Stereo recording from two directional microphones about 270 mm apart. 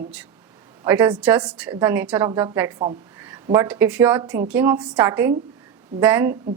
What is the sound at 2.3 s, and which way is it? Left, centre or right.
A woman's voice, centre.